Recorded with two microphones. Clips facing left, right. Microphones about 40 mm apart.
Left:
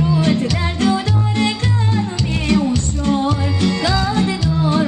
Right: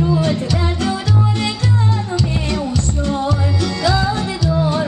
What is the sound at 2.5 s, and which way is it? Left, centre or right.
Music, left.